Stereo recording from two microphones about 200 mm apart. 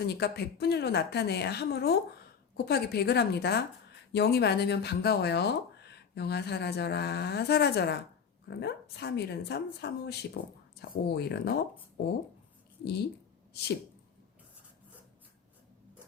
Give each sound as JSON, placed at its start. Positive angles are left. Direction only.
{"t": 0.1, "sound": "speech", "side_deg": 55}
{"t": 12.8, "sound": "speech", "side_deg": 55}